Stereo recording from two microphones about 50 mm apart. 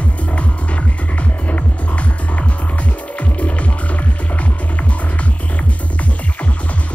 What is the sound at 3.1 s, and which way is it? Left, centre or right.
Music, left.